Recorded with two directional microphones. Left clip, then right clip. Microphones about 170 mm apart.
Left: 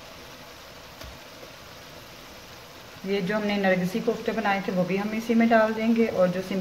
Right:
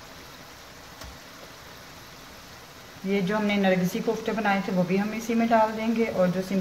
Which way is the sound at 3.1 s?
15° left (ahead or behind).